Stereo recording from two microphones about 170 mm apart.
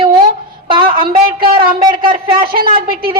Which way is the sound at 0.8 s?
60° right (ahead or behind).